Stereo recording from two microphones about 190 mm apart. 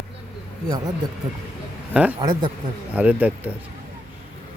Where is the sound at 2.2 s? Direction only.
25° right (ahead or behind).